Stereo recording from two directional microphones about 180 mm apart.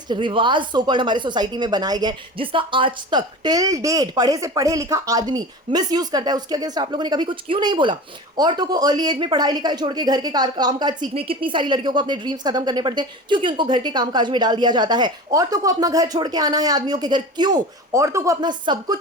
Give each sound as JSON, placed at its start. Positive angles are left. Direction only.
{"t": 0.1, "sound": "a woman's voice", "side_deg": -25}